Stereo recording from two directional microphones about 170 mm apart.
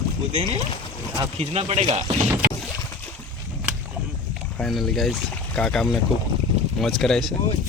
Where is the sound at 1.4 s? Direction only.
35° right (ahead or behind).